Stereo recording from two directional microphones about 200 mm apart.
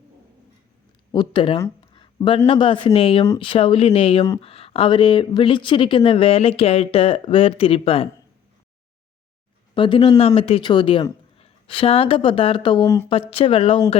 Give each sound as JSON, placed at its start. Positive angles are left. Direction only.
{"t": 1.1, "sound": "a man's voice", "side_deg": 25}
{"t": 9.7, "sound": "speech", "side_deg": 25}
{"t": 13.1, "sound": "speech", "side_deg": 30}